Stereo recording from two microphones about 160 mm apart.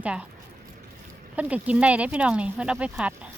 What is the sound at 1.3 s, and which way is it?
Speech, 10° right (ahead or behind).